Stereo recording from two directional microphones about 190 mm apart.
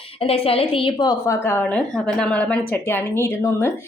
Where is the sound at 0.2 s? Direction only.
30° left (ahead or behind).